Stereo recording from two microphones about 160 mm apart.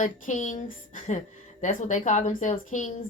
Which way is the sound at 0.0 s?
50° left (ahead or behind).